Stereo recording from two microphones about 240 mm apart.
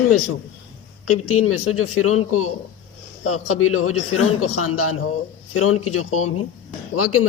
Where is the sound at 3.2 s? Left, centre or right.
Left.